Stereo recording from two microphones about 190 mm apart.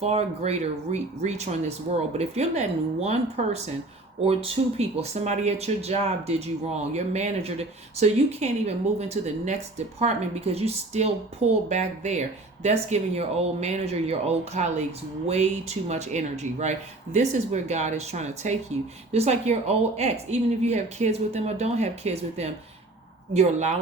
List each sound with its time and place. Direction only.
0.0 s speech: 35° right (ahead or behind)